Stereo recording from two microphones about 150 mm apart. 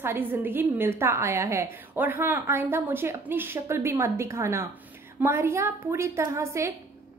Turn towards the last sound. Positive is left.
turn(degrees=-20)  # may be behind; listen again after turning